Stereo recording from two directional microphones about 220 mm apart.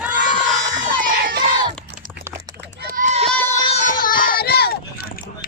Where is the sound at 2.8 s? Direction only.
40° right (ahead or behind).